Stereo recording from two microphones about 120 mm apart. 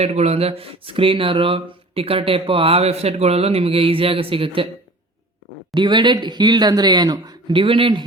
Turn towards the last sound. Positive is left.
turn(degrees=-50)  # may be behind; listen again after turning